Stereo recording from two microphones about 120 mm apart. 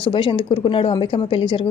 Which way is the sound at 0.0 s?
45° left (ahead or behind).